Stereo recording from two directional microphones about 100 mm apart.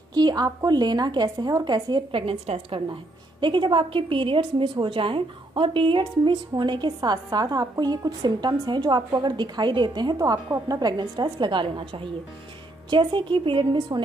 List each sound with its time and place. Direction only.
0.1 s a woman's voice: 45° right (ahead or behind)
2.2 s a woman's voice: 80° right
2.9 s a woman's voice: 50° right (ahead or behind)